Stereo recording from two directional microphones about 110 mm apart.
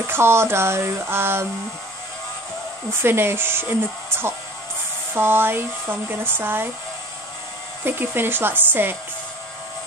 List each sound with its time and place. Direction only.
0.0 s speech: 20° right (ahead or behind)
2.9 s speech: 20° right (ahead or behind)
5.1 s speech: 20° right (ahead or behind)
7.8 s speech: 20° right (ahead or behind)